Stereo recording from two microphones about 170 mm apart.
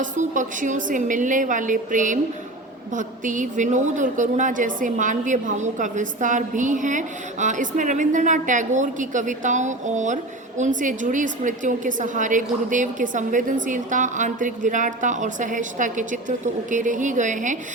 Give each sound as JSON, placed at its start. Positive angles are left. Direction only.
{"t": 0.0, "sound": "a woman's voice", "side_deg": -50}